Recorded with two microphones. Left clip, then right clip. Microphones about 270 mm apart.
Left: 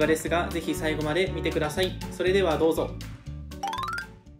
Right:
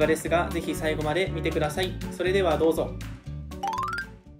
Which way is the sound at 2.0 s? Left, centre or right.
Centre.